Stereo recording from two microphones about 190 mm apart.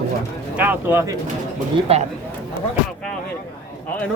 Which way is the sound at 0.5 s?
10° right (ahead or behind).